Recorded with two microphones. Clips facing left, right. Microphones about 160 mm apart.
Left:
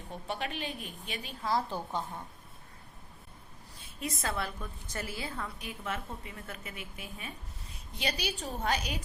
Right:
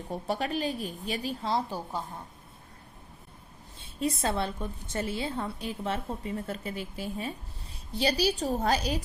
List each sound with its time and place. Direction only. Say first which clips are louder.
0.1 s a woman's voice: right 6 dB; 40° right (ahead or behind)
1.7 s a woman's voice: right 1 dB; 10° right (ahead or behind)
3.8 s a woman's voice: right 8 dB; 30° right (ahead or behind)